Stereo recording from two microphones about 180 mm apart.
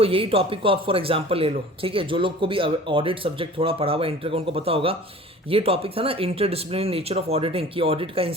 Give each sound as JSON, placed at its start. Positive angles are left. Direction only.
{"t": 0.0, "sound": "speech", "side_deg": -30}